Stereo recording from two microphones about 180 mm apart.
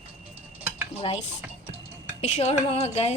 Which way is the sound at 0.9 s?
30° left (ahead or behind).